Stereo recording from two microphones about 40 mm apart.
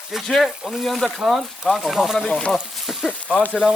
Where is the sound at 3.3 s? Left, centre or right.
Left.